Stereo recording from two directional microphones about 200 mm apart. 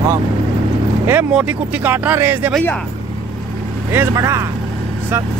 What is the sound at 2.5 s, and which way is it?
Speech, 5° left (ahead or behind).